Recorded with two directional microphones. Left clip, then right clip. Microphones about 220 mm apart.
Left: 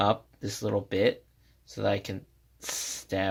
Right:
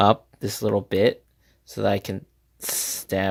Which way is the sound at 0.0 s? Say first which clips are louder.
Right 7 dB; 45° right (ahead or behind).